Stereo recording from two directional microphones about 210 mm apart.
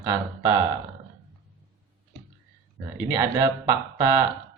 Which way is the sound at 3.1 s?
15° right (ahead or behind).